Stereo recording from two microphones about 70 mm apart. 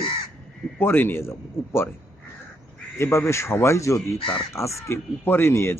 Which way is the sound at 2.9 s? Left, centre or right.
Left.